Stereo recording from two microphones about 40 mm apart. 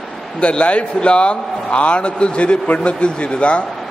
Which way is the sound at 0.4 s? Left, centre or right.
Left.